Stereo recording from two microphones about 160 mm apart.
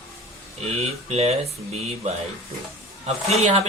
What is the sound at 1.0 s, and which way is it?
Speech, 40° right (ahead or behind).